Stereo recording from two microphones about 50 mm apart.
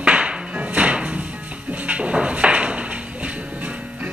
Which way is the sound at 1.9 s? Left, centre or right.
Right.